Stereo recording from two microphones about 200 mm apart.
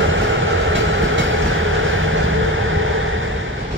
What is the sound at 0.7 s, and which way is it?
Vehicle, 75° right (ahead or behind).